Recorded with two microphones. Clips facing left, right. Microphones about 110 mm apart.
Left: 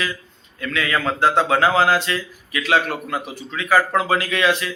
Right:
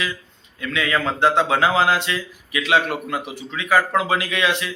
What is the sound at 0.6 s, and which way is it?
A man's voice, 20° right (ahead or behind).